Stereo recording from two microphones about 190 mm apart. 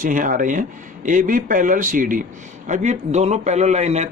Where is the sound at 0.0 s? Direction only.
45° right (ahead or behind).